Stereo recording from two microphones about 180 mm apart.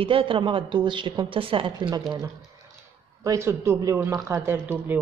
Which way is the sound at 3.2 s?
15° right (ahead or behind).